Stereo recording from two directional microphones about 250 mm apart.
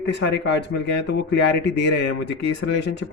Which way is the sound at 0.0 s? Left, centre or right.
Left.